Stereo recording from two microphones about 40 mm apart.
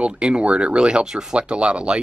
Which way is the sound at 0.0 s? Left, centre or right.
Right.